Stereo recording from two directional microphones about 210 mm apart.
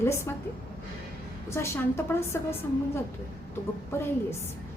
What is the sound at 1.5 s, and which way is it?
Speech, 10° left (ahead or behind).